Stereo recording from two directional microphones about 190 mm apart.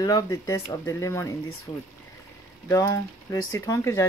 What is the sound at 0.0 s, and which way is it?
Speech, 20° left (ahead or behind).